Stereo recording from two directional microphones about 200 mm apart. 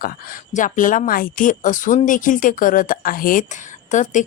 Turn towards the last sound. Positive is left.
turn(degrees=40)  # may be behind; listen again after turning